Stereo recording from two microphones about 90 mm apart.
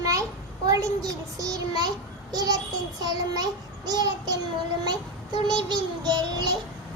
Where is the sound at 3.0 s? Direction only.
50° right (ahead or behind).